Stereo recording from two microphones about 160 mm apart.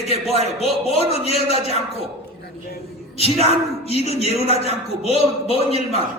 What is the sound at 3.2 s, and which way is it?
A man's voice, 40° left (ahead or behind).